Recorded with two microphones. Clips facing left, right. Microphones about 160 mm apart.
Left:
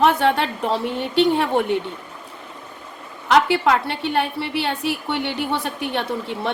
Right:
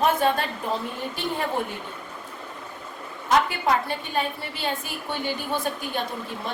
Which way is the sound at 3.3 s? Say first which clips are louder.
Left 5 dB; 80° left.